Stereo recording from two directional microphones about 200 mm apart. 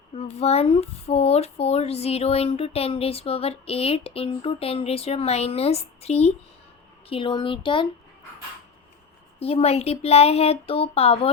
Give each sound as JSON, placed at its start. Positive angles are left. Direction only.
{"t": 0.2, "sound": "speech", "side_deg": 30}
{"t": 9.4, "sound": "speech", "side_deg": 30}